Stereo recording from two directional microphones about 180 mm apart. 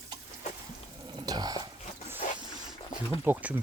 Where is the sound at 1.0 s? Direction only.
20° right (ahead or behind).